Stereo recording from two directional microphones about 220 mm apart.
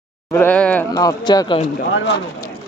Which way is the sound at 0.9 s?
15° left (ahead or behind).